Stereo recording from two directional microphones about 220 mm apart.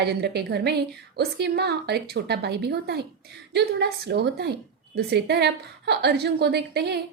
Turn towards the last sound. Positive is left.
turn(degrees=-50)  # may be behind; listen again after turning